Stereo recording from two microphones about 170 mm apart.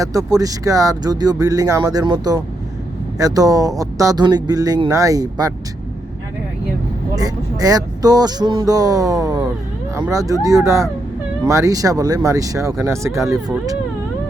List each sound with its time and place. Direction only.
0.0 s speech: 20° right (ahead or behind)
7.2 s speech: 20° right (ahead or behind)